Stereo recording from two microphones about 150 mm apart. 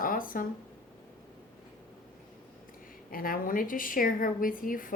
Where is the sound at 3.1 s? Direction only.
70° left (ahead or behind).